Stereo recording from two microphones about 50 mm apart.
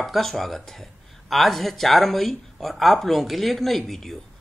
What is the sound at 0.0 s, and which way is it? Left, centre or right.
Speech, centre.